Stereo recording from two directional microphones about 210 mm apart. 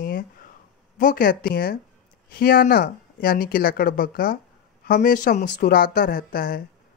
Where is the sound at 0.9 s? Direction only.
40° left (ahead or behind).